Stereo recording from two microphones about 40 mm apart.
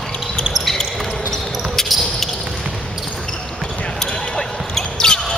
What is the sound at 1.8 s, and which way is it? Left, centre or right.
Basketball bounce, centre.